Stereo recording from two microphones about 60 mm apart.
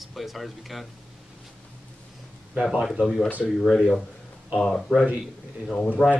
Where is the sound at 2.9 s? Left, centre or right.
Centre.